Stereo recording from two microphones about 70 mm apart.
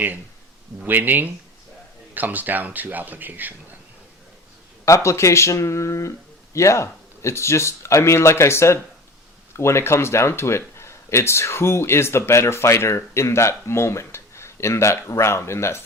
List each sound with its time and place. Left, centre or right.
0.9 s speech: right
4.9 s speech: left